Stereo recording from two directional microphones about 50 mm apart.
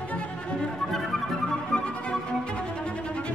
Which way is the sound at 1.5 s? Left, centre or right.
Left.